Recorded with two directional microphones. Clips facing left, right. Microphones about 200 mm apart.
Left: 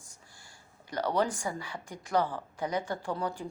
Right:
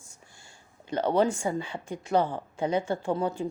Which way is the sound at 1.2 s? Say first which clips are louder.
Right 6 dB; 25° right (ahead or behind).